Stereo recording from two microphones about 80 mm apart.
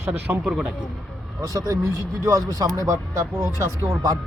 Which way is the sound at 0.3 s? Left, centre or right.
Right.